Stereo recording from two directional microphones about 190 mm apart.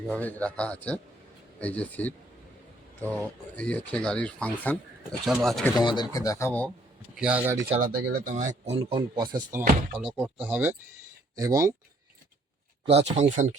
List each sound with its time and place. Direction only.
0.1 s speech: 10° left (ahead or behind)
3.5 s speech: 5° left (ahead or behind)
5.8 s speech: 25° left (ahead or behind)
7.2 s speech: 5° right (ahead or behind)
7.8 s speech: 45° right (ahead or behind)
8.8 s speech: 25° right (ahead or behind)
12.8 s speech: 30° right (ahead or behind)